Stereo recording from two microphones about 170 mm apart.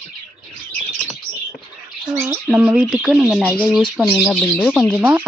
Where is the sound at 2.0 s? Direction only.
15° right (ahead or behind).